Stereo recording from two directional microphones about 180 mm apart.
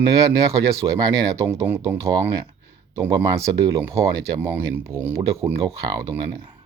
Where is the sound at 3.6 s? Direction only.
15° right (ahead or behind).